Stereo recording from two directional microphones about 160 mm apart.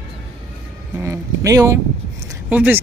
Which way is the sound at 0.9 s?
20° right (ahead or behind).